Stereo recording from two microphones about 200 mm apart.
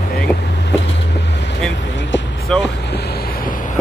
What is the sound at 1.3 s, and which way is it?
Vehicle, 60° left (ahead or behind).